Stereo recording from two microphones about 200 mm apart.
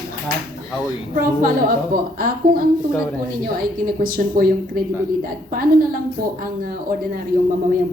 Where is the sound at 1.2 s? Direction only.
45° right (ahead or behind).